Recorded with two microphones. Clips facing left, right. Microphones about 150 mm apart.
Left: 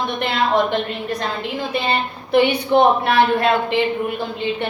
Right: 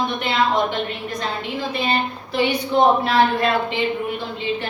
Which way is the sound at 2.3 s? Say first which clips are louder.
Left 5 dB; 60° left (ahead or behind).